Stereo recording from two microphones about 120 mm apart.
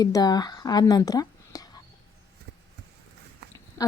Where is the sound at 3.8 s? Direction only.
30° left (ahead or behind).